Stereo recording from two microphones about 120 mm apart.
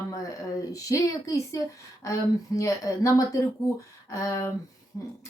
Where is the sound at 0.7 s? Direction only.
30° left (ahead or behind).